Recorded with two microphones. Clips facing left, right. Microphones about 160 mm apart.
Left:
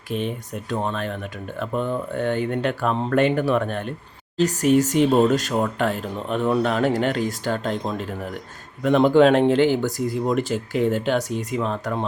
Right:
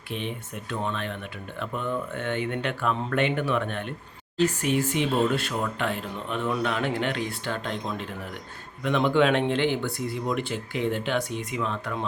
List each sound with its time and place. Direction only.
0.1 s speech: 40° left (ahead or behind)